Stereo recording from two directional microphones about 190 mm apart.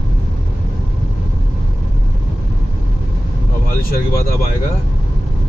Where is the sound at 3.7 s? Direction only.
50° left (ahead or behind).